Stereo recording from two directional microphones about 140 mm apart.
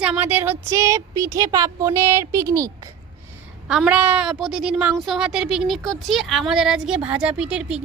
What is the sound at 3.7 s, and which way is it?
A woman's voice, 5° right (ahead or behind).